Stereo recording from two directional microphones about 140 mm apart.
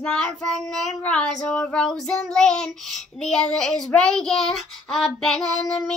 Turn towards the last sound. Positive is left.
turn(degrees=5)  # may be behind; listen again after turning